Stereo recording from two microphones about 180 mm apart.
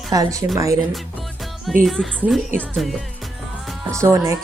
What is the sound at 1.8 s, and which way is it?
A woman's voice, centre (ahead or behind).